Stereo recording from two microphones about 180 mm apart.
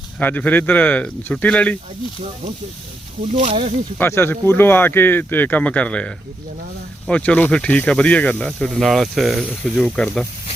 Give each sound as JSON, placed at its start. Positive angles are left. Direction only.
{"t": 0.2, "sound": "speech", "side_deg": 10}
{"t": 3.4, "sound": "speech", "side_deg": -30}
{"t": 3.9, "sound": "speech", "side_deg": 10}